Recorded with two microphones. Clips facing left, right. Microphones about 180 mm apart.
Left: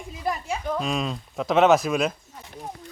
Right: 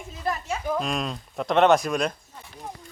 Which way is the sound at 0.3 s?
10° left (ahead or behind).